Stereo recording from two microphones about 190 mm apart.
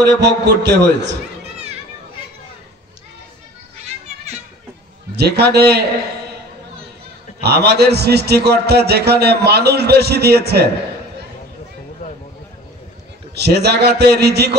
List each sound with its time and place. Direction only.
0.0 s a man's voice: 65° right (ahead or behind)
5.1 s a man's voice: 60° right (ahead or behind)
7.4 s a man's voice: 60° right (ahead or behind)
13.3 s a man's voice: 60° right (ahead or behind)